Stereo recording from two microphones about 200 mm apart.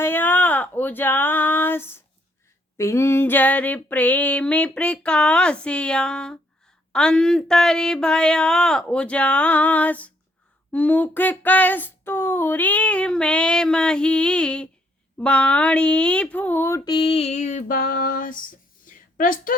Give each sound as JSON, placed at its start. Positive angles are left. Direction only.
{"t": 0.0, "sound": "speech", "side_deg": 10}
{"t": 2.7, "sound": "child singing", "side_deg": 15}
{"t": 6.9, "sound": "speech", "side_deg": 5}
{"t": 10.7, "sound": "child singing", "side_deg": 10}
{"t": 18.9, "sound": "a sound", "side_deg": 45}